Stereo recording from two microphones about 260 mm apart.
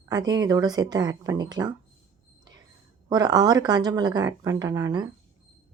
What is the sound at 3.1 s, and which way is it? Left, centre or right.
A woman's voice, centre.